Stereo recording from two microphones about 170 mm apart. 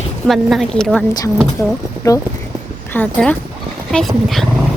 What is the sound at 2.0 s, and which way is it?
Speech, 20° left (ahead or behind).